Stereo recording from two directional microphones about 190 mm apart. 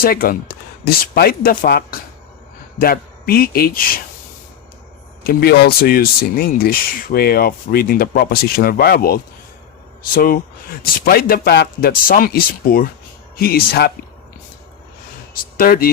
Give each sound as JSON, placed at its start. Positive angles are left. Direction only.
{"t": 0.0, "sound": "speech", "side_deg": 50}
{"t": 5.2, "sound": "speech", "side_deg": 50}
{"t": 15.3, "sound": "speech", "side_deg": 50}